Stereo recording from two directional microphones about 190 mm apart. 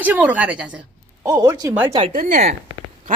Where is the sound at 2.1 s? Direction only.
45° right (ahead or behind).